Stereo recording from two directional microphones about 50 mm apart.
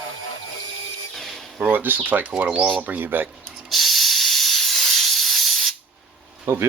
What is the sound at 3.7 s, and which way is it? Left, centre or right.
Hiss, centre.